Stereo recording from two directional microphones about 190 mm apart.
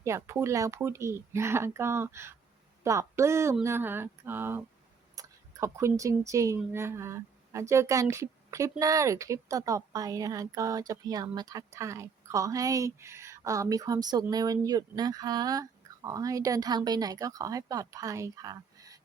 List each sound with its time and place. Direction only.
0.0 s speech: 15° right (ahead or behind)